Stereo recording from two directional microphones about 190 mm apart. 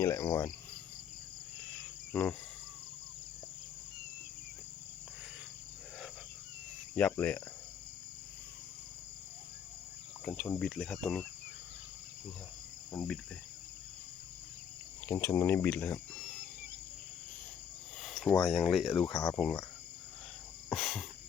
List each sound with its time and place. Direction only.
0.0 s speech: 15° left (ahead or behind)
6.9 s speech: 5° left (ahead or behind)
10.2 s speech: 5° left (ahead or behind)
12.9 s cricket: 10° left (ahead or behind)
15.0 s speech: 10° left (ahead or behind)
18.0 s speech: centre (ahead or behind)
19.0 s speech: 20° left (ahead or behind)
20.7 s speech: centre (ahead or behind)